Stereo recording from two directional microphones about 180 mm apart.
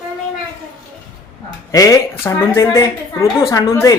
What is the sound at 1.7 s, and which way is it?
A woman's voice, 20° left (ahead or behind).